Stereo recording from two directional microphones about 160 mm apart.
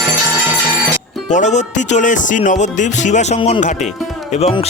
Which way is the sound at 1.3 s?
50° left (ahead or behind).